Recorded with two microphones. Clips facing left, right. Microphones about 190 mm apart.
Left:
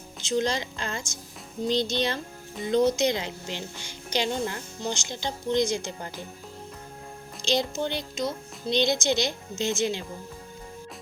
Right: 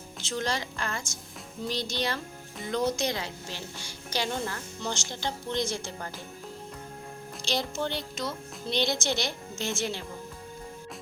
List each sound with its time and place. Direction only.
0.2 s a woman's voice: 20° left (ahead or behind)
7.4 s a woman's voice: 20° left (ahead or behind)